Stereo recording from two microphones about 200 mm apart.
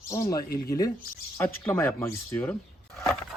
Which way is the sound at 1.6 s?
10° left (ahead or behind).